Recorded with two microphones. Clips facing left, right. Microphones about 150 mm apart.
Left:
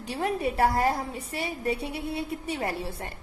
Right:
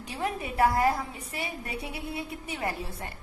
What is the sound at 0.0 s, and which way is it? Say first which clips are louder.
A woman's voice: left 5 dB; 35° left (ahead or behind).